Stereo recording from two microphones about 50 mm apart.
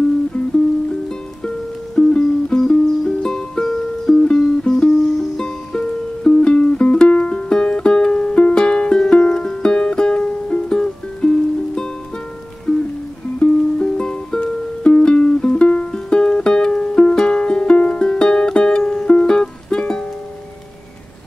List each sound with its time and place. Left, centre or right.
2.0 s music: centre
12.7 s music: centre
13.4 s music: centre